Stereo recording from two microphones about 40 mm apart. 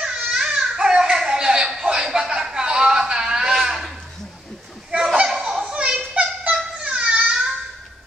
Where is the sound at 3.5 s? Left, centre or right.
Centre.